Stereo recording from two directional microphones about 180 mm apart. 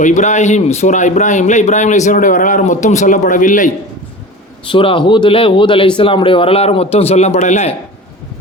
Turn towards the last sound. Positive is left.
turn(degrees=40)  # may be behind; listen again after turning